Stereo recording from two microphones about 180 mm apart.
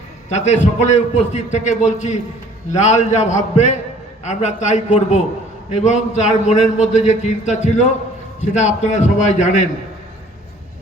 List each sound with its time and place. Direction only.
0.3 s a man's voice: 40° left (ahead or behind)